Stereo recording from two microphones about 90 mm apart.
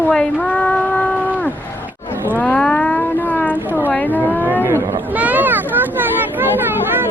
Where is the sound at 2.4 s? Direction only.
10° left (ahead or behind).